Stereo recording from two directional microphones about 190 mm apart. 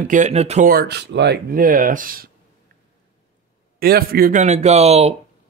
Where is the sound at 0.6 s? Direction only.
55° right (ahead or behind).